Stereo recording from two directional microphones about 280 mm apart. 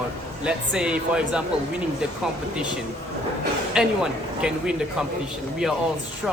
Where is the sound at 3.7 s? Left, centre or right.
Centre.